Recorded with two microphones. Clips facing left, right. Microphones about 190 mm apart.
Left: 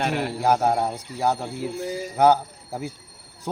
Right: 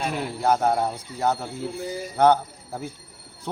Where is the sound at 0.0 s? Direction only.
75° left (ahead or behind).